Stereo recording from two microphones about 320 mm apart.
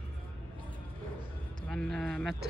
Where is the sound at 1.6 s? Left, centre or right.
Centre.